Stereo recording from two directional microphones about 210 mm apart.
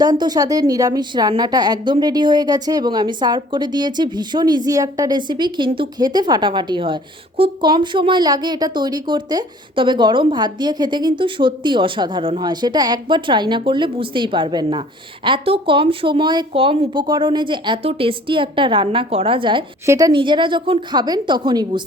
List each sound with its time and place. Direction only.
0.0 s a woman's voice: 20° right (ahead or behind)